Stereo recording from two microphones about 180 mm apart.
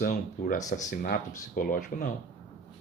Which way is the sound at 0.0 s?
50° left (ahead or behind).